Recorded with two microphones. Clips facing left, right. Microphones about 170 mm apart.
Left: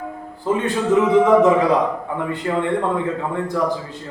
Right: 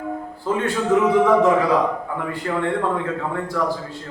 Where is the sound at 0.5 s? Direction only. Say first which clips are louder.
Left 2 dB; 20° left (ahead or behind).